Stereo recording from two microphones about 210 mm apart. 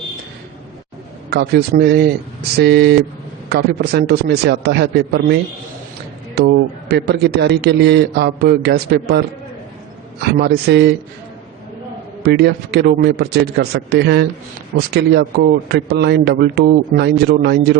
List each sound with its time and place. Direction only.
1.3 s a man's voice: 50° right (ahead or behind)
10.3 s a man's voice: 50° right (ahead or behind)
12.2 s a man's voice: 50° right (ahead or behind)